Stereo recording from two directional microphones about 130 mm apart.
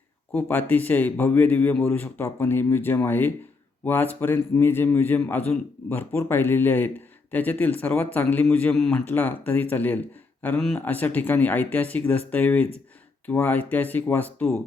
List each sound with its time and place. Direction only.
0.3 s a man's voice: 15° left (ahead or behind)
8.7 s speech: 5° left (ahead or behind)
9.0 s a man's voice: 15° left (ahead or behind)